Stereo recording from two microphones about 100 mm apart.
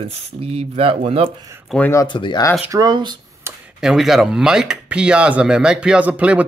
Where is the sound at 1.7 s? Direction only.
5° left (ahead or behind).